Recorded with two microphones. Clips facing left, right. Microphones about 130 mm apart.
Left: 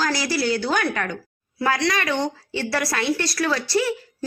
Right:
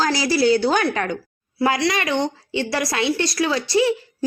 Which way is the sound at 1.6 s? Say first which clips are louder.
Right 2 dB; 10° right (ahead or behind).